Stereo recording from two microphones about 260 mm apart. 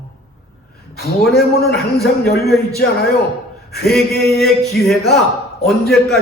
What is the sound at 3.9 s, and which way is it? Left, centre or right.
A man's voice, centre.